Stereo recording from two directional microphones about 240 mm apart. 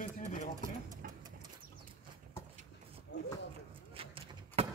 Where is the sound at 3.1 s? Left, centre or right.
Left.